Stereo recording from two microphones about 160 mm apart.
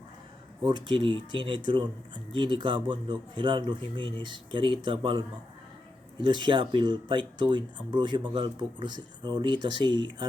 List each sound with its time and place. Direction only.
0.6 s speech: 30° right (ahead or behind)
6.2 s speech: 30° right (ahead or behind)